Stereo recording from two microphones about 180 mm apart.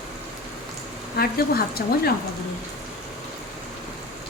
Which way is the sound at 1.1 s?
60° left (ahead or behind).